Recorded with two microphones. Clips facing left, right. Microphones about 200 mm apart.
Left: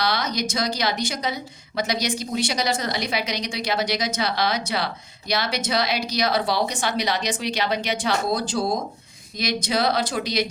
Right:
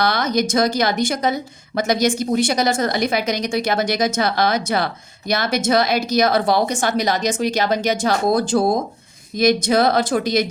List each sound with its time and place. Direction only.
0.0 s speech: 50° right (ahead or behind)